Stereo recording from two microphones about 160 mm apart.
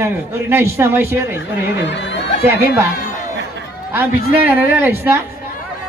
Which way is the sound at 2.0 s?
90° left.